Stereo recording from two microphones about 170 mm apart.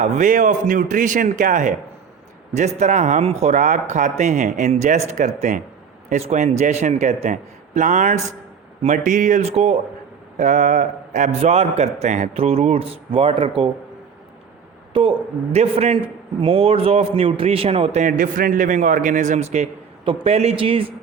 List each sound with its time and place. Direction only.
0.0 s a man's voice: 50° right (ahead or behind); by 13.7 s 30° right (ahead or behind)
15.5 s a man's voice: 40° right (ahead or behind)